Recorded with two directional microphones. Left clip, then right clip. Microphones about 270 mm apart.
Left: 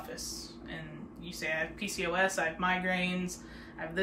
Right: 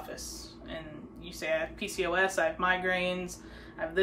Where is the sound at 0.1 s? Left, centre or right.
Centre.